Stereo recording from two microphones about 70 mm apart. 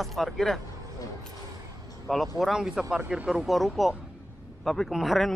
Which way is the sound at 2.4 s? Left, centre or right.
Centre.